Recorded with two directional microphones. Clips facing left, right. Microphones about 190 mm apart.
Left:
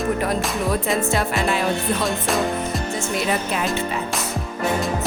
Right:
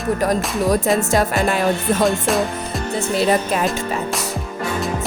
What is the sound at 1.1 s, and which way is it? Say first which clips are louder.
Music: right 4 dB; 45° right (ahead or behind).